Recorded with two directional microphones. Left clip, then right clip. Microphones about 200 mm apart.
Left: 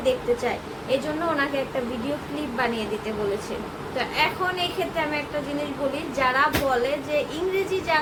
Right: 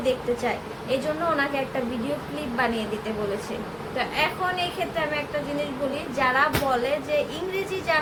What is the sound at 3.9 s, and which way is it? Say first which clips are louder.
Speech: left 1 dB; 10° left (ahead or behind).